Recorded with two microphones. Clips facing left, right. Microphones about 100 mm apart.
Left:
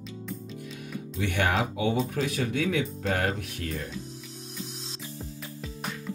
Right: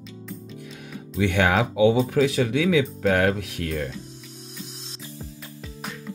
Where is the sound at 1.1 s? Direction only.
70° right (ahead or behind); by 3.8 s 90° right.